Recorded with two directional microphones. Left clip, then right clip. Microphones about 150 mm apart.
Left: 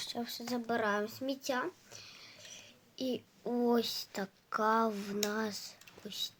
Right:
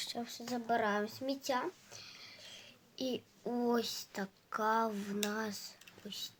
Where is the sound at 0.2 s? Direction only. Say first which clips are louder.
Left 2 dB; 20° left (ahead or behind).